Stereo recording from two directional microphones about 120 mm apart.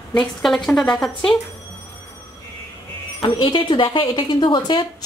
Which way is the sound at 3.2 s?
40° left (ahead or behind).